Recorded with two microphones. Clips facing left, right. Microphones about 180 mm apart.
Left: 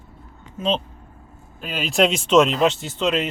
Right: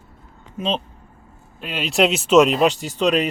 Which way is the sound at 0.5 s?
10° right (ahead or behind).